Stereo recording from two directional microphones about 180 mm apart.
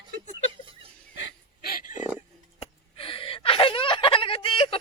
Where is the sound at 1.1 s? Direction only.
65° left (ahead or behind); by 2.1 s 50° left (ahead or behind).